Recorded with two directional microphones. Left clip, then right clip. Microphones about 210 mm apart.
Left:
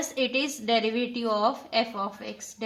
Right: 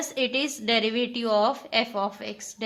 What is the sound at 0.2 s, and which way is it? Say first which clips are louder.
A woman's voice: right 1 dB; 35° right (ahead or behind).